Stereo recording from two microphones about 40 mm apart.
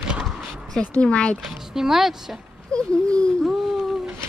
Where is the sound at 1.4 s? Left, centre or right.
Centre.